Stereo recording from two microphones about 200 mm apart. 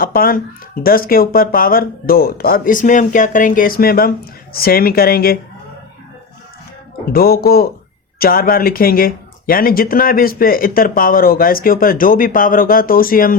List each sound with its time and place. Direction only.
0.0 s speech: 45° left (ahead or behind)
7.1 s speech: 50° left (ahead or behind)